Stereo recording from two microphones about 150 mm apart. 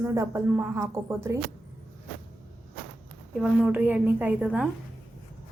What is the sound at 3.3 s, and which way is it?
A woman's voice, 5° right (ahead or behind).